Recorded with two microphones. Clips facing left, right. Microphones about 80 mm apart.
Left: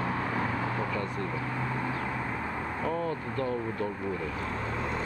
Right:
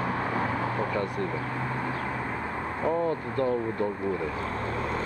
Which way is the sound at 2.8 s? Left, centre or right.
Right.